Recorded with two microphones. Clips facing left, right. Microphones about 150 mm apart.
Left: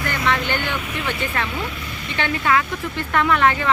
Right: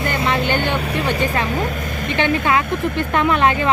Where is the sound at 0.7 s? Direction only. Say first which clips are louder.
Right 6 dB; 35° right (ahead or behind).